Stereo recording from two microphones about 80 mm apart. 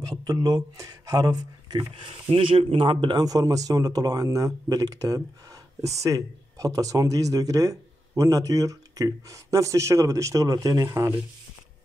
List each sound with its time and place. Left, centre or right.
0.3 s speech: right
0.6 s speech: right